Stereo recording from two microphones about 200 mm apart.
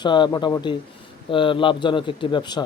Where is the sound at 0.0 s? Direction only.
20° left (ahead or behind).